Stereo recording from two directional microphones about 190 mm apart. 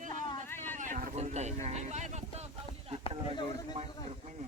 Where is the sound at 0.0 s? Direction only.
40° right (ahead or behind).